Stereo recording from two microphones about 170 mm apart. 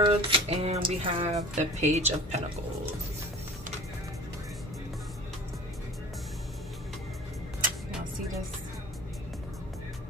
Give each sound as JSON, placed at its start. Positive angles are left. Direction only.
{"t": 0.0, "sound": "speech", "side_deg": -30}